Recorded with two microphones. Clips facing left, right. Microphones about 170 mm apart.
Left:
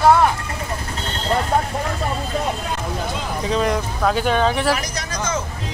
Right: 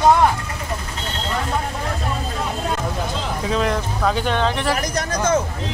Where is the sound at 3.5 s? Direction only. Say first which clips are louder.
Left 1 dB; 5° left (ahead or behind).